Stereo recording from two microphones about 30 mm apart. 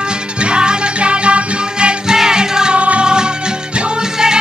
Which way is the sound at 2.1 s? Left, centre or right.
Right.